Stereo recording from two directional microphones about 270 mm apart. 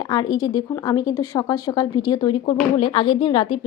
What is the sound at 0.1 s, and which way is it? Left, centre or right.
A woman's voice, centre.